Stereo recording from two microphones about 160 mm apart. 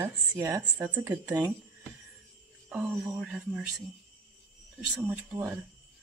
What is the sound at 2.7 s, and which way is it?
Speech, 10° right (ahead or behind).